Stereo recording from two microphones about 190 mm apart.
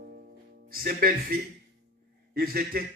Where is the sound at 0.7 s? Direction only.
50° right (ahead or behind).